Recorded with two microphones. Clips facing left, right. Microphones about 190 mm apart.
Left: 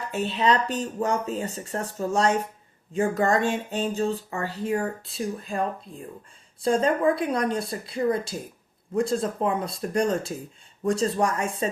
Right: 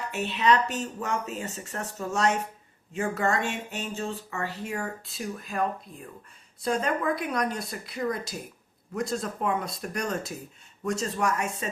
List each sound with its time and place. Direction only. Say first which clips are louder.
0.1 s speech: left 1 dB; 30° left (ahead or behind)